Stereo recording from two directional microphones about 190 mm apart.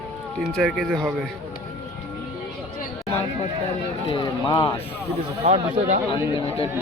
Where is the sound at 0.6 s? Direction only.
Centre (ahead or behind).